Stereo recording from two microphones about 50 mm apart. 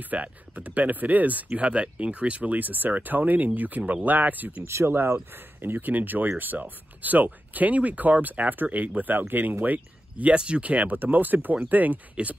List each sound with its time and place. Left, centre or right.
0.0 s speech: right
4.6 s speech: right